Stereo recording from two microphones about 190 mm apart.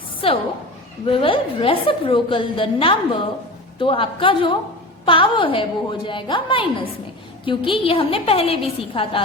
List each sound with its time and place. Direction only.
0.2 s a woman's voice: 30° left (ahead or behind)